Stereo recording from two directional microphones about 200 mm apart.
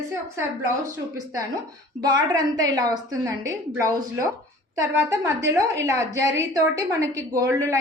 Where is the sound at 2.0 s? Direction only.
20° right (ahead or behind).